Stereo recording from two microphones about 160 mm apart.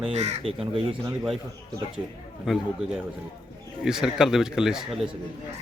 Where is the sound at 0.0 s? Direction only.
45° right (ahead or behind).